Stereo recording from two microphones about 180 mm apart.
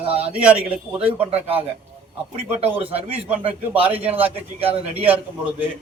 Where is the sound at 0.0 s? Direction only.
30° right (ahead or behind).